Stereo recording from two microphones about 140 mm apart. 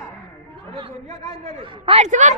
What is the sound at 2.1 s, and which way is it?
Speech, 60° right (ahead or behind).